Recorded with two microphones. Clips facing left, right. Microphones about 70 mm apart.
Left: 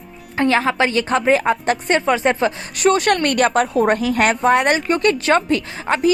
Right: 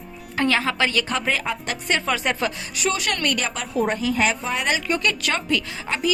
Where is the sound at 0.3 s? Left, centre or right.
Left.